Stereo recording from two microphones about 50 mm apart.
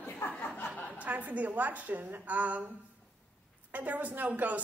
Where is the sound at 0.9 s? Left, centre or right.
Right.